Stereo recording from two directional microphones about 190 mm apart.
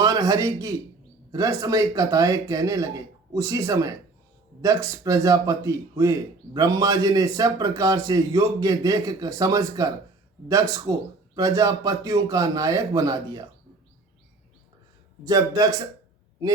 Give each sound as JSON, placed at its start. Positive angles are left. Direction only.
{"t": 0.0, "sound": "a man's voice", "side_deg": -20}
{"t": 15.2, "sound": "speech", "side_deg": -20}